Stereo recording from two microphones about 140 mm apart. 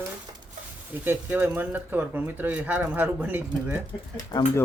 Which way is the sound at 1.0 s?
15° right (ahead or behind).